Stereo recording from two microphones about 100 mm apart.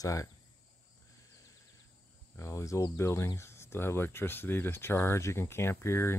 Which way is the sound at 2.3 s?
30° left (ahead or behind).